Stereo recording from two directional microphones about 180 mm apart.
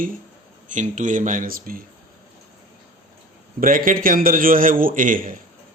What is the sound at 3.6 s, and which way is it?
Speech, 50° right (ahead or behind).